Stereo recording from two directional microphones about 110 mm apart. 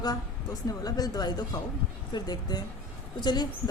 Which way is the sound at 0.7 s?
35° left (ahead or behind).